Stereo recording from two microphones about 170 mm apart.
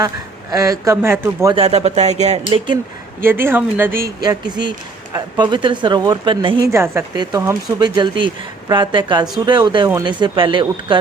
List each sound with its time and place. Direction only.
0.5 s a man's voice: 20° right (ahead or behind)
1.5 s speech: 35° right (ahead or behind)
3.2 s a man's voice: 15° right (ahead or behind)
4.2 s speech: 25° right (ahead or behind)
6.7 s speech: 15° right (ahead or behind)